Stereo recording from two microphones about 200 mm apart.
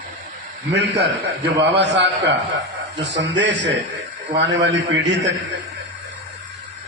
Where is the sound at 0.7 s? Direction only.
60° right (ahead or behind).